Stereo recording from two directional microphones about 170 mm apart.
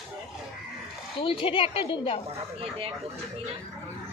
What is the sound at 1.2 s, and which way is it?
Speech, 30° left (ahead or behind).